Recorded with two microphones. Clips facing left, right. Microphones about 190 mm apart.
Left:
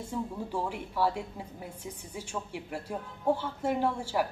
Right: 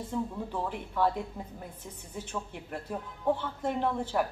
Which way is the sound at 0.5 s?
10° left (ahead or behind).